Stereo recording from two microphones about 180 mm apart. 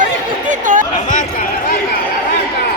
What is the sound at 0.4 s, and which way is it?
Chatter, 45° right (ahead or behind).